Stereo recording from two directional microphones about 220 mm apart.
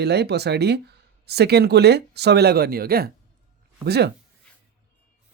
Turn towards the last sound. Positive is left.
turn(degrees=-45)  # may be behind; listen again after turning